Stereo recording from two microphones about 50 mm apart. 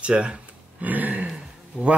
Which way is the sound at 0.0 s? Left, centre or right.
Centre.